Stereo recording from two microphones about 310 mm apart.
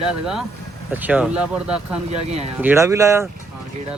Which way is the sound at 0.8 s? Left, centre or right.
Centre.